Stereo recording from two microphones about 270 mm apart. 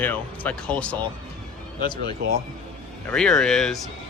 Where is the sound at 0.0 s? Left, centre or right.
Centre.